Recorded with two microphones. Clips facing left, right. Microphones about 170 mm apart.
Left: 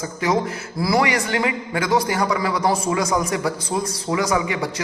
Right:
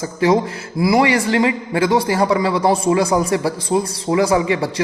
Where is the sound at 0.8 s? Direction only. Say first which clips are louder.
Right 5 dB; 15° right (ahead or behind).